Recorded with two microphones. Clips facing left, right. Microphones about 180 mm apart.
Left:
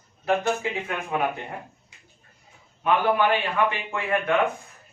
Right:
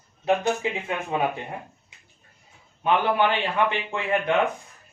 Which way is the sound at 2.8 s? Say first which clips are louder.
Even; 25° right (ahead or behind).